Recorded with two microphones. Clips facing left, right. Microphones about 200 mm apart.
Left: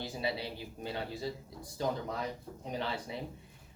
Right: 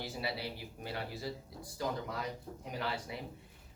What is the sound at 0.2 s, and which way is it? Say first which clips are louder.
Speech: left 4 dB; 20° left (ahead or behind).